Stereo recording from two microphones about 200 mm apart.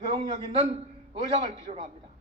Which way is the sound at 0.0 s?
25° right (ahead or behind).